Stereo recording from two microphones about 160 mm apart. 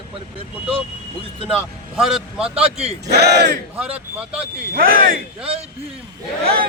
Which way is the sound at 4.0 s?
5° right (ahead or behind).